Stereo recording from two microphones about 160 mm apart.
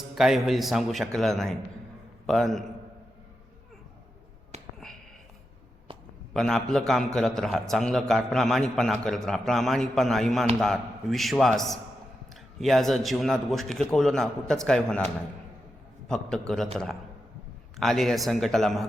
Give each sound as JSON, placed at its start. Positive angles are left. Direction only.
{"t": 0.2, "sound": "a man's voice", "side_deg": 0}
{"t": 4.5, "sound": "a sound", "side_deg": -45}
{"t": 6.3, "sound": "a man's voice", "side_deg": 0}